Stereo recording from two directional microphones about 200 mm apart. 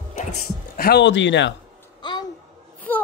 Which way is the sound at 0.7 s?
50° left (ahead or behind).